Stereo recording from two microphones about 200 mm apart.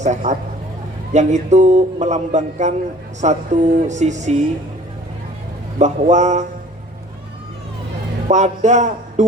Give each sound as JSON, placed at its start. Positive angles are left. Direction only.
{"t": 0.0, "sound": "a man's voice", "side_deg": -35}
{"t": 5.8, "sound": "a man's voice", "side_deg": -35}
{"t": 8.3, "sound": "a man's voice", "side_deg": -35}